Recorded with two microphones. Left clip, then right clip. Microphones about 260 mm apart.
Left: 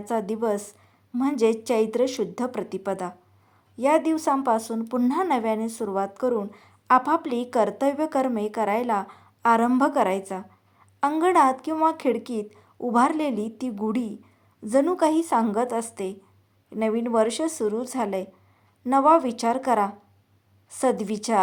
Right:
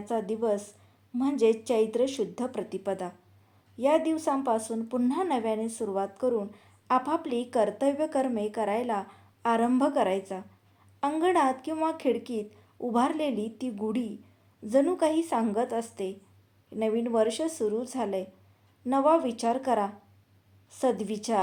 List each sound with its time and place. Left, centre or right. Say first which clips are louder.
0.0 s speech: left 3 dB; left